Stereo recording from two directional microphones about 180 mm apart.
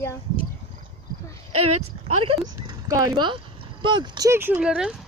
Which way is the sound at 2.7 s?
20° right (ahead or behind).